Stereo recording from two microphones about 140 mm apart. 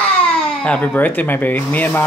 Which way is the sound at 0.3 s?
5° left (ahead or behind).